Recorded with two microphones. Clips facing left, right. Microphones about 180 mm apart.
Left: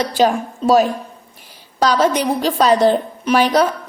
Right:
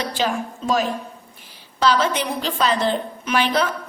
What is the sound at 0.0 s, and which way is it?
A woman's voice, 40° left (ahead or behind).